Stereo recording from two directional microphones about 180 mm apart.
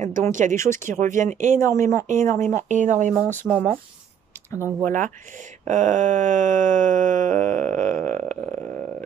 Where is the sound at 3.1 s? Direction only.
5° left (ahead or behind).